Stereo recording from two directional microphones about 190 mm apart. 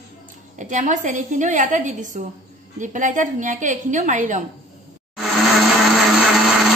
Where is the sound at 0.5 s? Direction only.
40° right (ahead or behind).